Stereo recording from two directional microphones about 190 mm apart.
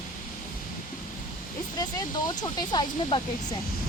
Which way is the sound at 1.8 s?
20° left (ahead or behind).